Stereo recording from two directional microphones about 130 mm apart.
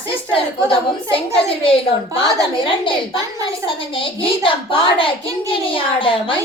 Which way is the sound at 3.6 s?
40° left (ahead or behind).